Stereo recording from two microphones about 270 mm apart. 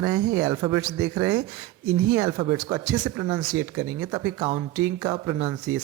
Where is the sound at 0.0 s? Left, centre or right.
Centre.